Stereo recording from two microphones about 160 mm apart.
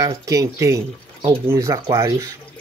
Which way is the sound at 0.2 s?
20° right (ahead or behind).